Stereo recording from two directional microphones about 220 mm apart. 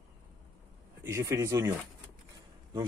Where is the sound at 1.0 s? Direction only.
10° right (ahead or behind).